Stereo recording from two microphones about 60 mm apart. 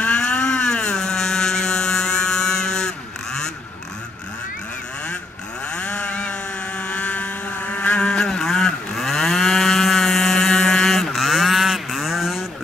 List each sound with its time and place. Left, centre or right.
0.0 s a sound: centre
5.8 s chainsaw: left
6.8 s vehicle: left; by 12.4 s centre